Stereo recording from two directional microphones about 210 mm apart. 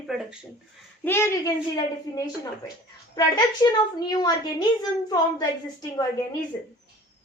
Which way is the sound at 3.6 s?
20° left (ahead or behind).